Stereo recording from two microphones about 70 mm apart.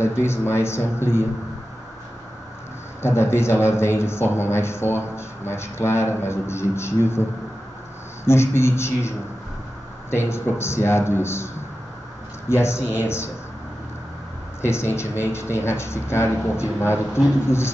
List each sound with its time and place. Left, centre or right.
0.0 s speech: left
3.0 s speech: left
8.3 s speech: left
10.1 s speech: left
14.6 s speech: left